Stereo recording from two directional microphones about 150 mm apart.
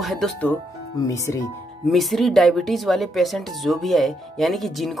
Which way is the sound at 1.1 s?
20° left (ahead or behind).